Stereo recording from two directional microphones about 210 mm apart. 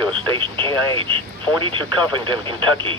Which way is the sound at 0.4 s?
25° right (ahead or behind).